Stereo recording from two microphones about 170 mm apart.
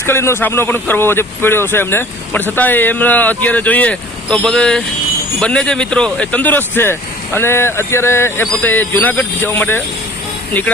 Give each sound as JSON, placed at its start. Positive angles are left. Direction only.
{"t": 0.0, "sound": "a man's voice", "side_deg": 15}